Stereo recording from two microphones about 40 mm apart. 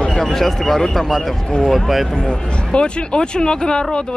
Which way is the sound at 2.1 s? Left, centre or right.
Left.